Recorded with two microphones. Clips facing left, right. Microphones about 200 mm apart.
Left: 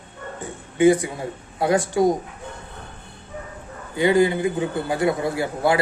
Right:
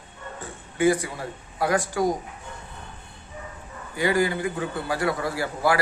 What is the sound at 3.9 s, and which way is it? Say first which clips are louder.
A man's voice: left 5 dB; 20° left (ahead or behind).